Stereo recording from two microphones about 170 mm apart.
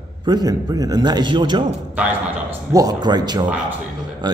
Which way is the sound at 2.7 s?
25° right (ahead or behind).